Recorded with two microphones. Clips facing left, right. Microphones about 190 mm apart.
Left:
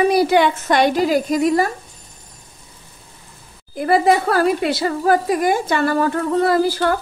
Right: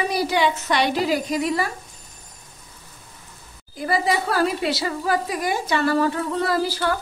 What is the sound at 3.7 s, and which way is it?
A woman's voice, 55° left (ahead or behind).